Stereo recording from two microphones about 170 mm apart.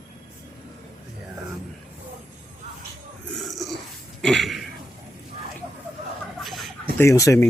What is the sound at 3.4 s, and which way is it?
Burping, centre (ahead or behind).